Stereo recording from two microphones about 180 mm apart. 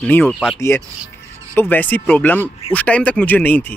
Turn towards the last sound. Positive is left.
turn(degrees=10)  # may be behind; listen again after turning